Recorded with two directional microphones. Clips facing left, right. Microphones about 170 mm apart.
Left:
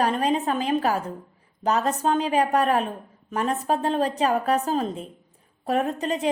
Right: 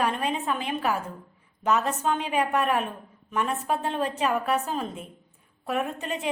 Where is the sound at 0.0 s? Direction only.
40° left (ahead or behind).